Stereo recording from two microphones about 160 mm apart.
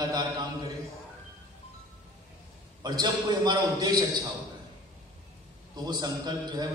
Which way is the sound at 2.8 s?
25° right (ahead or behind).